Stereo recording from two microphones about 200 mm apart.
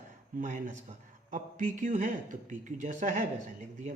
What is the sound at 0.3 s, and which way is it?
A man's voice, 40° right (ahead or behind).